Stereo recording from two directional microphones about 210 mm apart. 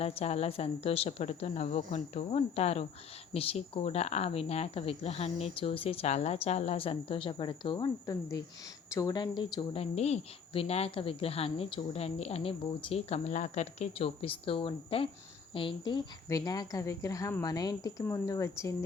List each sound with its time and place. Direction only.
0.0 s a woman's voice: 30° left (ahead or behind); by 18.7 s 15° left (ahead or behind)